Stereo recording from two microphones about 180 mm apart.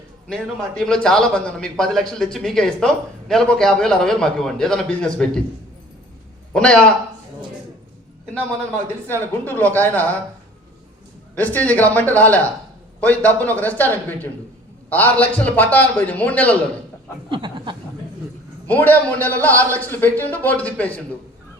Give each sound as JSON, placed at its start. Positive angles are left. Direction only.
{"t": 0.3, "sound": "speech", "side_deg": 5}
{"t": 6.5, "sound": "speech", "side_deg": 5}
{"t": 9.2, "sound": "a man's voice", "side_deg": 10}
{"t": 11.3, "sound": "a man's voice", "side_deg": 10}
{"t": 17.2, "sound": "speech", "side_deg": -25}
{"t": 18.7, "sound": "a man's voice", "side_deg": 10}